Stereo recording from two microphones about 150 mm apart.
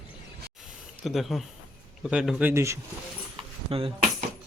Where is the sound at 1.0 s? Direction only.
Centre (ahead or behind).